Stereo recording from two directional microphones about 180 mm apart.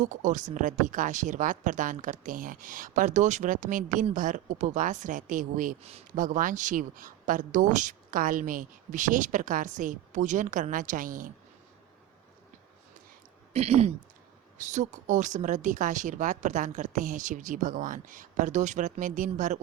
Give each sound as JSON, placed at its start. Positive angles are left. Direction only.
{"t": 0.0, "sound": "speech", "side_deg": -45}
{"t": 13.5, "sound": "speech", "side_deg": -35}